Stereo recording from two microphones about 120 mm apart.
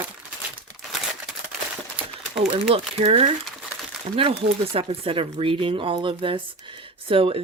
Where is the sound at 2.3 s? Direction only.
60° right (ahead or behind).